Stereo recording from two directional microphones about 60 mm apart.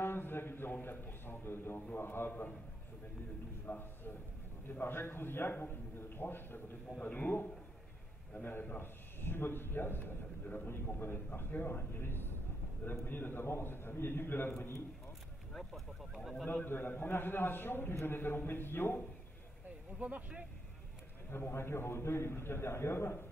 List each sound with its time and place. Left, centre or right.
0.0 s a man's voice: left
3.6 s a man's voice: left
16.6 s a man's voice: left
20.0 s speech: right
21.3 s a man's voice: left